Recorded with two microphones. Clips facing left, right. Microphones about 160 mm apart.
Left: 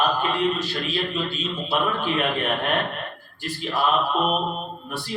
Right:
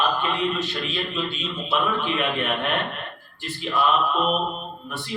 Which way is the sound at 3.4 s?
40° left (ahead or behind).